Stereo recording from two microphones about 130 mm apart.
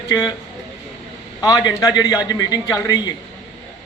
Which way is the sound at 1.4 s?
30° left (ahead or behind).